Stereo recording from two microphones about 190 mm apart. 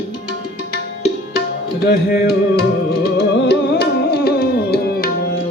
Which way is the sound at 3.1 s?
60° left (ahead or behind).